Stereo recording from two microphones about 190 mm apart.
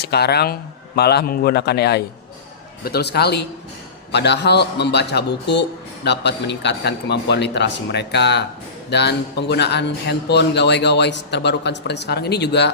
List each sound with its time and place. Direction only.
0.0 s a man's voice: 60° left (ahead or behind)